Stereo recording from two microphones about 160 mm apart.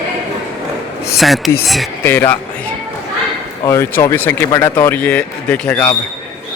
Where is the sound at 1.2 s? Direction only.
Centre (ahead or behind).